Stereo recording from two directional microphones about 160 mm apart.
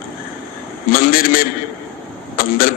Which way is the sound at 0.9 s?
65° left (ahead or behind).